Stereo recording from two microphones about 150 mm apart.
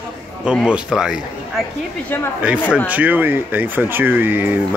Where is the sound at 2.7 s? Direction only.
10° right (ahead or behind).